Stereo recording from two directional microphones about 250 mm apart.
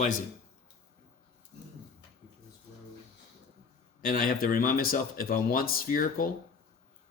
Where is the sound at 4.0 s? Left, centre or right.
Left.